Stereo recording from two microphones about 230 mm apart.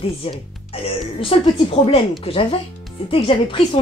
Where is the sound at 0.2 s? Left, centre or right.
Left.